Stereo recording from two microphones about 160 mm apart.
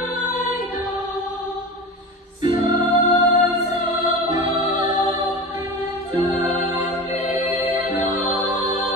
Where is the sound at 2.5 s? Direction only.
40° left (ahead or behind).